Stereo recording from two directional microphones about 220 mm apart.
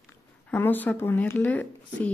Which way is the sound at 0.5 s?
10° left (ahead or behind).